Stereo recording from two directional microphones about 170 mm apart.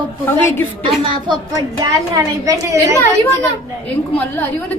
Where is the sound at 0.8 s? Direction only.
30° right (ahead or behind).